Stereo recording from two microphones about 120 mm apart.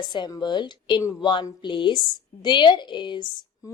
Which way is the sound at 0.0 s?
40° left (ahead or behind).